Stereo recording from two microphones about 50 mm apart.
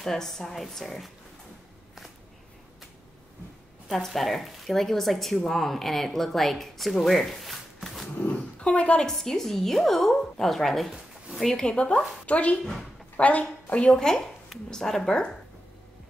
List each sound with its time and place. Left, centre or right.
0.0 s speech: centre
3.9 s speech: centre
8.4 s dog: left
9.0 s speech: centre
11.6 s a woman's voice: left
13.8 s speech: centre